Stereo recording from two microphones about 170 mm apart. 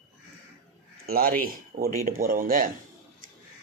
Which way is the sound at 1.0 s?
60° right (ahead or behind).